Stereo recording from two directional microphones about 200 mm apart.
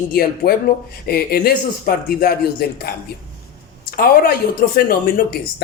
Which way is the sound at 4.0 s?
50° left (ahead or behind).